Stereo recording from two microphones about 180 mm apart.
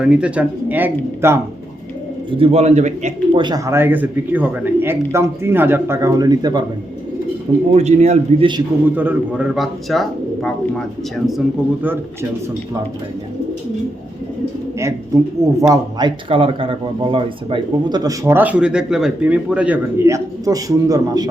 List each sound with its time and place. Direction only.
0.0 s speech: 5° right (ahead or behind)
2.4 s a man's voice: 35° right (ahead or behind)
3.4 s speech: 20° right (ahead or behind)
7.7 s a man's voice: 35° right (ahead or behind)
9.0 s speech: 10° right (ahead or behind)
14.8 s speech: 15° right (ahead or behind)